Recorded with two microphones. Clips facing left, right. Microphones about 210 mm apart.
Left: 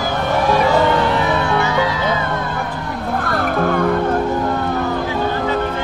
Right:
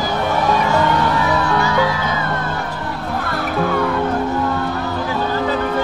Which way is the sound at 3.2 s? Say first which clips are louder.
Left 2 dB; 50° left (ahead or behind).